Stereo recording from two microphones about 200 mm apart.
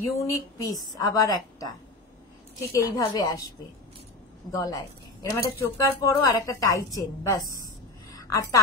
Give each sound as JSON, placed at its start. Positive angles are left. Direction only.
{"t": 0.2, "sound": "a woman's voice", "side_deg": 15}
{"t": 2.7, "sound": "a woman's voice", "side_deg": 20}
{"t": 4.5, "sound": "a woman's voice", "side_deg": 15}